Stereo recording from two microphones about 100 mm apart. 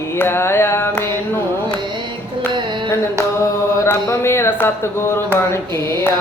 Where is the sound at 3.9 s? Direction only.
25° left (ahead or behind).